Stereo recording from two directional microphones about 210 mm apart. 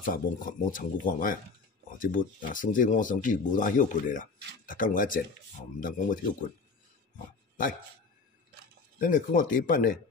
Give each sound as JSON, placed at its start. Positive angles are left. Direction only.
{"t": 0.0, "sound": "speech", "side_deg": 40}
{"t": 9.0, "sound": "speech", "side_deg": 40}